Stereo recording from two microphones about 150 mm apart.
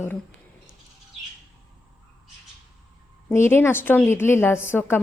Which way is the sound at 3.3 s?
15° left (ahead or behind).